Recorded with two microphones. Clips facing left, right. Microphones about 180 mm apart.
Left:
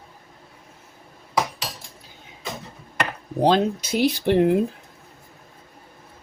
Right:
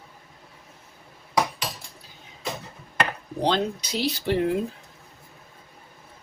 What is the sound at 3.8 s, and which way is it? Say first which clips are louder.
Speech: left 6 dB; 50° left (ahead or behind).